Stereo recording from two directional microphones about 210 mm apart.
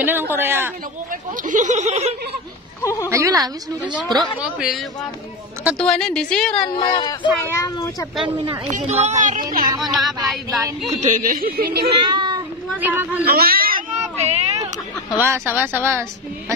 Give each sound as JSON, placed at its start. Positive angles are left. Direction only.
{"t": 0.0, "sound": "a man's voice", "side_deg": -10}
{"t": 1.5, "sound": "speech", "side_deg": -35}
{"t": 2.8, "sound": "speech", "side_deg": 15}
{"t": 3.1, "sound": "a man's voice", "side_deg": -15}
{"t": 4.4, "sound": "a woman's voice", "side_deg": -5}
{"t": 5.8, "sound": "a woman's voice", "side_deg": 0}
{"t": 6.6, "sound": "speech", "side_deg": 20}
{"t": 8.5, "sound": "speech", "side_deg": -30}
{"t": 9.8, "sound": "a woman's voice", "side_deg": 0}
{"t": 10.9, "sound": "speech", "side_deg": -35}
{"t": 12.0, "sound": "a child's voice", "side_deg": -20}
{"t": 12.8, "sound": "a man's voice", "side_deg": -10}
{"t": 13.2, "sound": "a sound", "side_deg": -45}
{"t": 15.2, "sound": "a man's voice", "side_deg": -10}